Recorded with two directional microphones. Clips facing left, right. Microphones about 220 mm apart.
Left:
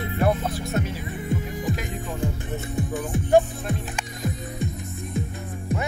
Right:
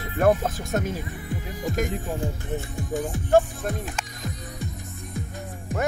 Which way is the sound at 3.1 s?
20° left (ahead or behind).